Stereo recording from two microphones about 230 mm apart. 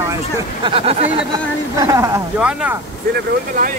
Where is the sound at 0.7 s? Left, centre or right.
Right.